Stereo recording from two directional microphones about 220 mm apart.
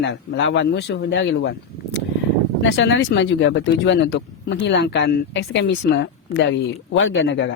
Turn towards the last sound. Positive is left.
turn(degrees=55)  # may be behind; listen again after turning